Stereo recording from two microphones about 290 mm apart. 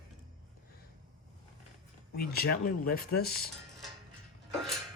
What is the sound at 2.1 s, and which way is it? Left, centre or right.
Speech, left.